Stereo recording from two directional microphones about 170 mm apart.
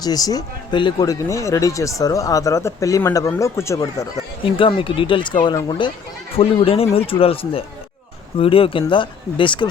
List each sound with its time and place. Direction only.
0.0 s speech: 20° left (ahead or behind)
4.4 s speech: 30° left (ahead or behind)